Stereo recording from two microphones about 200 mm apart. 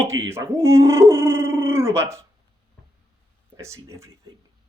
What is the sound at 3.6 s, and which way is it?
Speech, 15° right (ahead or behind).